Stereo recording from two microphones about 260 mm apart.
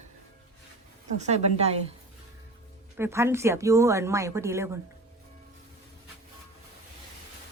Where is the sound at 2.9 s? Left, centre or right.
Centre.